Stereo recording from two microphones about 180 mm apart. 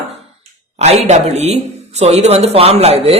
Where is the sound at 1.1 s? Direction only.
40° right (ahead or behind).